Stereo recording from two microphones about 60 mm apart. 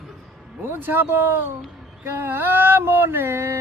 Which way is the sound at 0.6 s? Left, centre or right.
Right.